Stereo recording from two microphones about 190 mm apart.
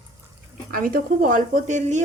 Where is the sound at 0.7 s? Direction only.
50° right (ahead or behind).